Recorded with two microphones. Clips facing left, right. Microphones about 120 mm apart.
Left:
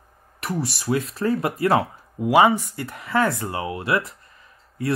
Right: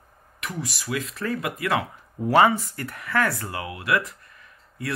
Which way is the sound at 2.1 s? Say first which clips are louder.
Left 2 dB; 15° left (ahead or behind).